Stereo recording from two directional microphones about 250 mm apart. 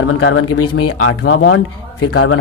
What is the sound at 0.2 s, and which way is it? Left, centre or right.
A man's voice, left.